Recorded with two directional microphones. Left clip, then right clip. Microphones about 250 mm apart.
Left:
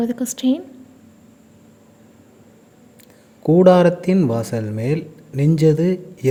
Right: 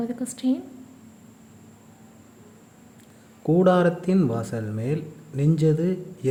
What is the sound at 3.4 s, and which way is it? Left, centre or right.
A man's voice, centre.